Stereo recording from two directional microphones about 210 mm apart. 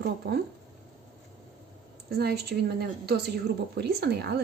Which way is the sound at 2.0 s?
50° right (ahead or behind).